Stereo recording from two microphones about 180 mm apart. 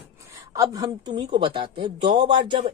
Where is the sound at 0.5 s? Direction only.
20° right (ahead or behind).